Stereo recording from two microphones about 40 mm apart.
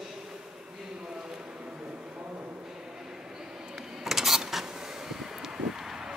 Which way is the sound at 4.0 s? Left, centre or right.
Centre.